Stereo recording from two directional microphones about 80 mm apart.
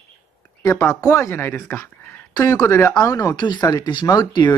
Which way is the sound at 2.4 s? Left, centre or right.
Left.